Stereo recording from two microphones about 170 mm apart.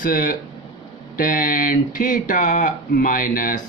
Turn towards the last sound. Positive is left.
turn(degrees=55)  # may be behind; listen again after turning